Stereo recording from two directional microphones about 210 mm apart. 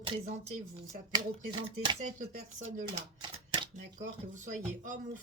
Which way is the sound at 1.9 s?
30° right (ahead or behind).